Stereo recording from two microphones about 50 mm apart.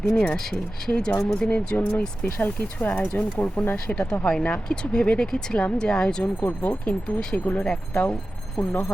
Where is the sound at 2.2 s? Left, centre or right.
Left.